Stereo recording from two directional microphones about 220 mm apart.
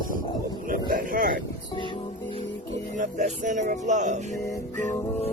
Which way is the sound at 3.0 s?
35° right (ahead or behind).